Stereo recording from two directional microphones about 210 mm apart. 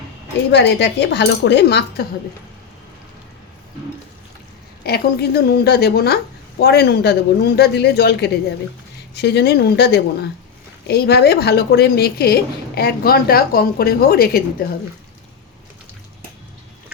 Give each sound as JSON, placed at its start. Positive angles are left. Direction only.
{"t": 0.5, "sound": "a woman's voice", "side_deg": 55}
{"t": 4.8, "sound": "a woman's voice", "side_deg": 50}